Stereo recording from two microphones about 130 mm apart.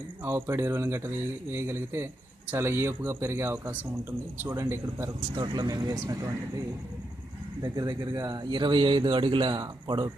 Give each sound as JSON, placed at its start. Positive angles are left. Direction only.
{"t": 0.3, "sound": "speech", "side_deg": -20}
{"t": 5.3, "sound": "speech", "side_deg": -35}
{"t": 7.6, "sound": "speech", "side_deg": -30}